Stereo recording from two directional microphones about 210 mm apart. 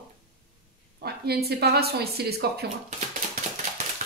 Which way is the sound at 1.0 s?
50° right (ahead or behind).